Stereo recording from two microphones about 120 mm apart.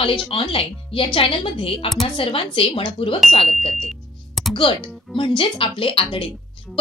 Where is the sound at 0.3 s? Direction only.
45° left (ahead or behind).